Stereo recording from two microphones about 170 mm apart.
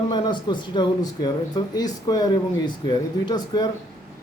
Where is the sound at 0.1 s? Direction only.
25° left (ahead or behind).